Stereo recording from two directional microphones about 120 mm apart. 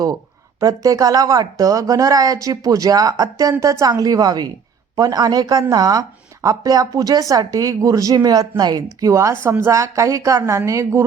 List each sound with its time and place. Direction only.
0.6 s a woman's voice: 30° right (ahead or behind)